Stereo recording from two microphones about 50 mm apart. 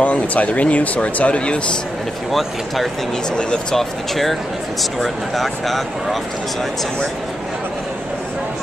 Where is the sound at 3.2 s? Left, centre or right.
Centre.